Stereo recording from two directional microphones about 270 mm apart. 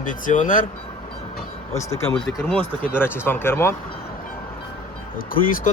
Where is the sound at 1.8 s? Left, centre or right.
Centre.